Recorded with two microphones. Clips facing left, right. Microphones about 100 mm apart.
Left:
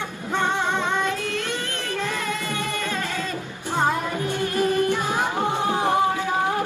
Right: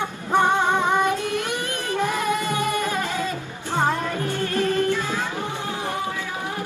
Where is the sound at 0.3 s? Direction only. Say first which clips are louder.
Right 4 dB; 15° right (ahead or behind).